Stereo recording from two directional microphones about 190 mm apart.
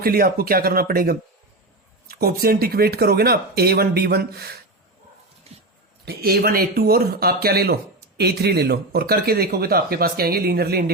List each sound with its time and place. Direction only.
0.0 s speech: 55° right (ahead or behind)
5.5 s a sound: 30° right (ahead or behind)
6.1 s speech: 55° right (ahead or behind)